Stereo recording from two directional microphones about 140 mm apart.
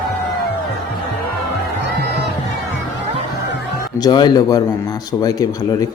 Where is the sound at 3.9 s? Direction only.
30° left (ahead or behind).